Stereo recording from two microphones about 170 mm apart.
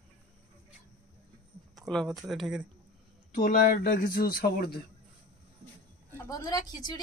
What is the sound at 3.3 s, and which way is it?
Speech, 60° left (ahead or behind).